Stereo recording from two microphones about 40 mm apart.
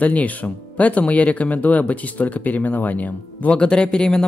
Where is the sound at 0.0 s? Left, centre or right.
Left.